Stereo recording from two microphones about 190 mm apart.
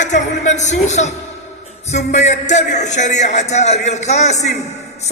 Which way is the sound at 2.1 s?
35° left (ahead or behind).